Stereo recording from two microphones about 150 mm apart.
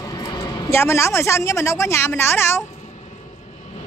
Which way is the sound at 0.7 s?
15° left (ahead or behind).